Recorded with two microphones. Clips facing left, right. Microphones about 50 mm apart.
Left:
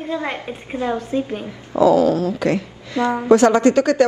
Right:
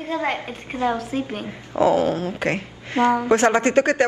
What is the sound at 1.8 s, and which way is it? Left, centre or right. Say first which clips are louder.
A woman's voice: left 4 dB; right.